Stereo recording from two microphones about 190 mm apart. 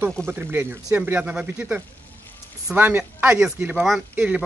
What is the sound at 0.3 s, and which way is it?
Speech, 10° right (ahead or behind).